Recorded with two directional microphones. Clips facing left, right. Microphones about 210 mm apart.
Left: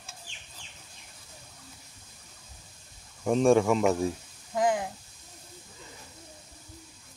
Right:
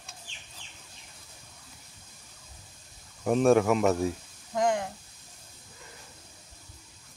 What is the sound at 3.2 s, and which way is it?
Speech, 5° right (ahead or behind).